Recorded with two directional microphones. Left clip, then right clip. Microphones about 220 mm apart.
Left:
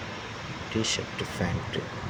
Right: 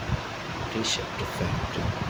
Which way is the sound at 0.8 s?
30° left (ahead or behind).